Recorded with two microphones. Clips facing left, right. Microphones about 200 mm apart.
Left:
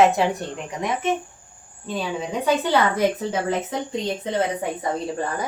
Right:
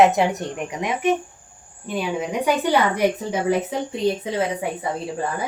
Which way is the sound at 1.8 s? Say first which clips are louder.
Right 2 dB; 15° right (ahead or behind).